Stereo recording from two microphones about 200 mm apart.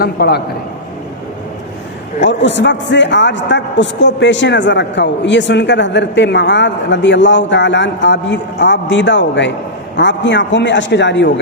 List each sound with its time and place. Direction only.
0.0 s a man's voice: 55° left (ahead or behind)
2.4 s a man's voice: 65° left (ahead or behind)